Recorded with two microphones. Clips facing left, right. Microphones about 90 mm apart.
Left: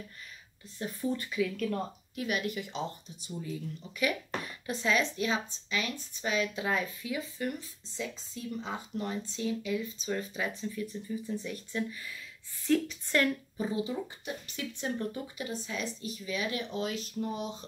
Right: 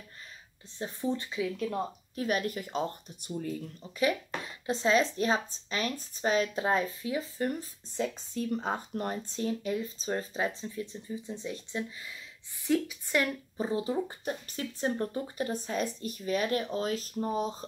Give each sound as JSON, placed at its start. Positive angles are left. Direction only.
{"t": 0.7, "sound": "speech", "side_deg": -25}
{"t": 2.1, "sound": "speech", "side_deg": -40}
{"t": 3.9, "sound": "speech", "side_deg": -30}
{"t": 7.9, "sound": "speech", "side_deg": -55}
{"t": 12.6, "sound": "a woman's voice", "side_deg": -10}
{"t": 13.6, "sound": "speech", "side_deg": -35}